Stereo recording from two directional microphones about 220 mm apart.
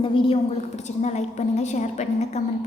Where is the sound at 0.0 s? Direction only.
25° left (ahead or behind).